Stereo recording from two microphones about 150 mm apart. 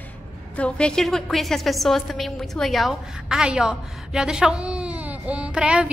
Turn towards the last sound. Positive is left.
turn(degrees=-5)  # may be behind; listen again after turning